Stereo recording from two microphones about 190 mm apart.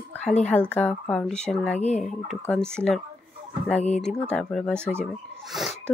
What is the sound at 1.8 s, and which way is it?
Speech, 35° left (ahead or behind).